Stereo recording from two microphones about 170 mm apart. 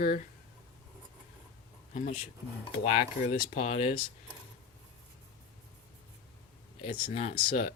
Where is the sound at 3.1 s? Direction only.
50° left (ahead or behind).